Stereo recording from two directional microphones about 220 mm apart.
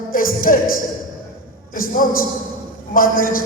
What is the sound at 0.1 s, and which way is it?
A woman's voice, 40° left (ahead or behind).